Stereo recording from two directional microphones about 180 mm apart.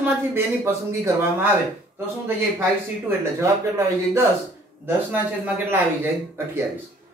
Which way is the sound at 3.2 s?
15° right (ahead or behind).